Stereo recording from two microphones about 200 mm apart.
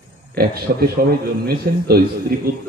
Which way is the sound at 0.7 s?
55° right (ahead or behind).